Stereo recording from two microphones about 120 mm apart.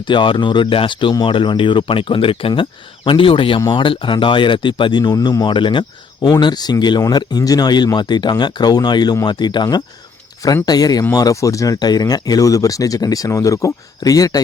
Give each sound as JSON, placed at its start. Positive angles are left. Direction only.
{"t": 0.1, "sound": "speech", "side_deg": 40}